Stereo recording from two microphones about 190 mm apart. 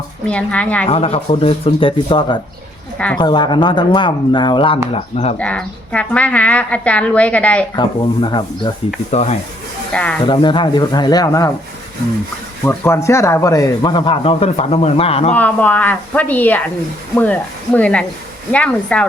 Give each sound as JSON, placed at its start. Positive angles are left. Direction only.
{"t": 0.3, "sound": "a woman's voice", "side_deg": 5}
{"t": 0.9, "sound": "speech", "side_deg": 30}
{"t": 4.9, "sound": "speech", "side_deg": 35}
{"t": 5.4, "sound": "a woman's voice", "side_deg": 5}
{"t": 7.8, "sound": "speech", "side_deg": 25}
{"t": 9.1, "sound": "speech", "side_deg": 35}
{"t": 9.9, "sound": "speech", "side_deg": 5}
{"t": 10.2, "sound": "speech", "side_deg": 25}
{"t": 12.6, "sound": "speech", "side_deg": 10}
{"t": 15.4, "sound": "a woman's voice", "side_deg": 10}
{"t": 17.7, "sound": "a woman's voice", "side_deg": 5}